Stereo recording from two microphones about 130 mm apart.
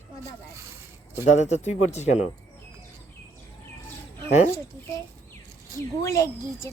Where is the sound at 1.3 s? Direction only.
60° left (ahead or behind).